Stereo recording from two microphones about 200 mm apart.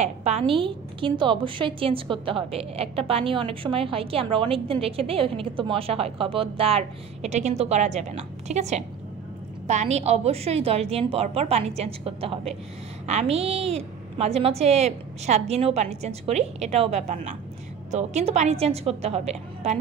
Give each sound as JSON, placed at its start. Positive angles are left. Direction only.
{"t": 0.0, "sound": "a woman's voice", "side_deg": -35}